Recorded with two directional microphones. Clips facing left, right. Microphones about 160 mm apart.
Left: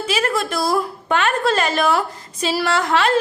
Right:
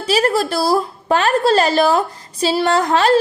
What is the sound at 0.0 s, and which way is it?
A woman's voice, 35° right (ahead or behind).